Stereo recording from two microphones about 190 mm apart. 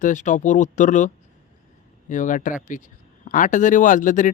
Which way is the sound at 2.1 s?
40° left (ahead or behind).